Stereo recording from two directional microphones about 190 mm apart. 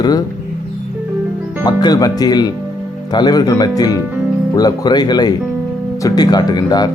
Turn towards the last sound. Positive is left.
turn(degrees=20)  # may be behind; listen again after turning